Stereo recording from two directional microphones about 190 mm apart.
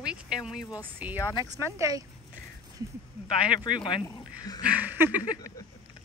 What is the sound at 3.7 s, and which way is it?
Speech, 25° left (ahead or behind).